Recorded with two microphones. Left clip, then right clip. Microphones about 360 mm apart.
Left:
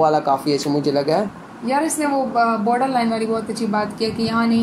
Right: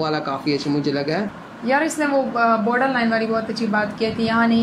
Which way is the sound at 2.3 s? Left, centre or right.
Centre.